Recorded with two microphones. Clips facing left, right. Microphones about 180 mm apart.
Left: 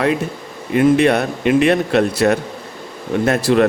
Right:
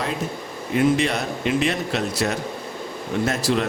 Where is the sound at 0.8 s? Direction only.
60° left (ahead or behind).